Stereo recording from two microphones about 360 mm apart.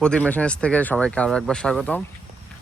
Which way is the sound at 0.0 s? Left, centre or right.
Centre.